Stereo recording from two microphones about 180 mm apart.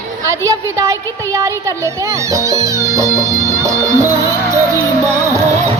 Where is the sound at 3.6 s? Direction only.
15° right (ahead or behind).